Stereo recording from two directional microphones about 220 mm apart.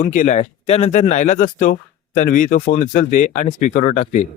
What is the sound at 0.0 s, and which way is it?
Speech, 35° left (ahead or behind).